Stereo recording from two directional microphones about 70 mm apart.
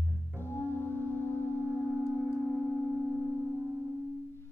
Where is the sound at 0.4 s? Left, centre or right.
Left.